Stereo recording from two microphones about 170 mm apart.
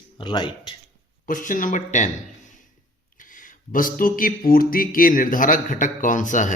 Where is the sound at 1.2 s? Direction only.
50° left (ahead or behind).